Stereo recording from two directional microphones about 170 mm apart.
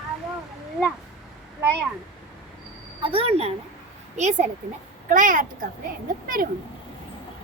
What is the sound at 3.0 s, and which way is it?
A woman's voice, 35° right (ahead or behind).